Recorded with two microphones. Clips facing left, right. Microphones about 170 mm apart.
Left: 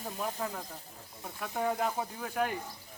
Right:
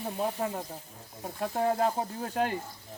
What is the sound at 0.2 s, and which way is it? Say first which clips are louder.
Speech: right 5 dB; 35° right (ahead or behind).